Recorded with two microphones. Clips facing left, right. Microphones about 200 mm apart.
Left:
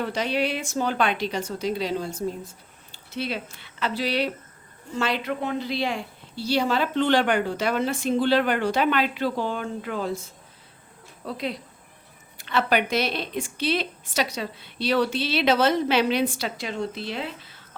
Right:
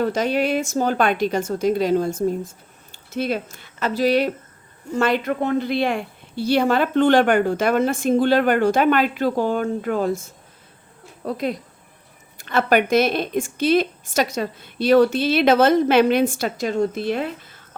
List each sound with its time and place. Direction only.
0.0 s a woman's voice: 45° right (ahead or behind)
11.3 s a woman's voice: 45° right (ahead or behind)